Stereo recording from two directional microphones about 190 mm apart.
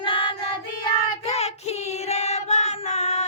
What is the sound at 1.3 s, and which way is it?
Child singing, 35° left (ahead or behind).